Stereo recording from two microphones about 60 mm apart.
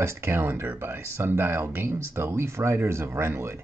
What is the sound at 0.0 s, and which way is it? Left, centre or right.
Speech, right.